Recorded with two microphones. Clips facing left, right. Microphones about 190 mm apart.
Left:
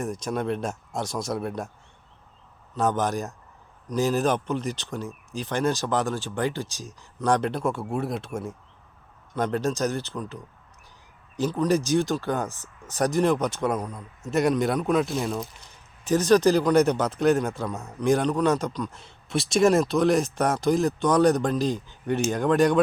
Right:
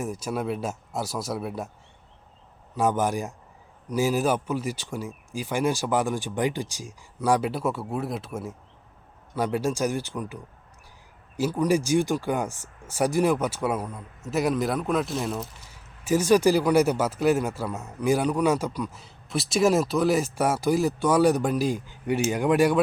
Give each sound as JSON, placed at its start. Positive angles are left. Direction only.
{"t": 0.0, "sound": "speech", "side_deg": -5}
{"t": 2.7, "sound": "a man's voice", "side_deg": -10}